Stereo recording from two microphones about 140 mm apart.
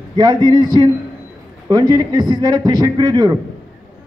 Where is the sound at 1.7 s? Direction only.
25° right (ahead or behind).